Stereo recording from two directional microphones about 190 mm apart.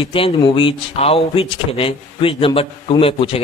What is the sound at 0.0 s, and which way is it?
Speech, 30° left (ahead or behind).